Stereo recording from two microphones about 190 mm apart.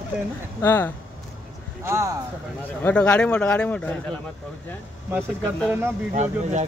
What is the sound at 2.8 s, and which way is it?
Speech, 5° left (ahead or behind).